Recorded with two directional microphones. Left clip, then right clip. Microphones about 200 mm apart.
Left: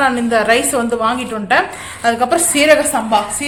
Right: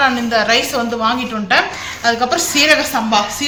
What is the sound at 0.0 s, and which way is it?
A woman's voice, 50° left (ahead or behind).